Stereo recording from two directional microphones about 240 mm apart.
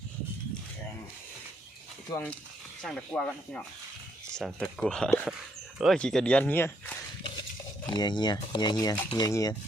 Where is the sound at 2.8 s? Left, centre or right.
Centre.